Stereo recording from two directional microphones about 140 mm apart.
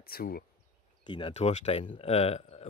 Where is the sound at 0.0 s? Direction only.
90° left.